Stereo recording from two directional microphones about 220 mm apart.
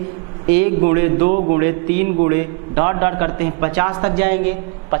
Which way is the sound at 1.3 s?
40° right (ahead or behind).